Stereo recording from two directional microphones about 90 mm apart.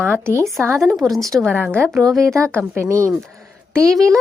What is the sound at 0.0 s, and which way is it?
Speech, 25° right (ahead or behind).